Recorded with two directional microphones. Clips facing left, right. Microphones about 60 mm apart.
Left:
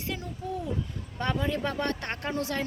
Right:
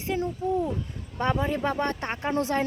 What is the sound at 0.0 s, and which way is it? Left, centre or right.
Speech, right.